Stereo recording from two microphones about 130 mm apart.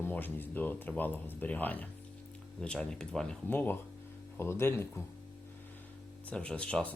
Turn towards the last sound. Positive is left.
turn(degrees=10)  # may be behind; listen again after turning